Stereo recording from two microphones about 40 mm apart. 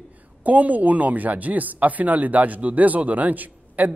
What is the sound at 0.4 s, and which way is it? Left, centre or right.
A man's voice, right.